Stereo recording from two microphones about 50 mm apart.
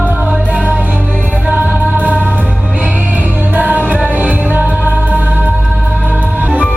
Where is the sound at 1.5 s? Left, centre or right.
Right.